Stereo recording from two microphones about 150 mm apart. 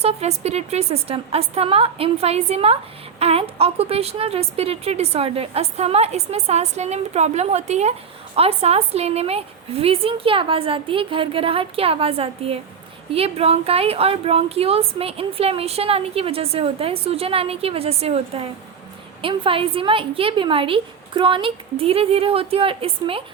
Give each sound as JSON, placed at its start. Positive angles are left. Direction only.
{"t": 0.0, "sound": "a woman's voice", "side_deg": -45}